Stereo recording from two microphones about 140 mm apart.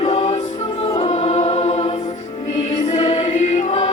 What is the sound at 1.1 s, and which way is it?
Choir, 50° left (ahead or behind).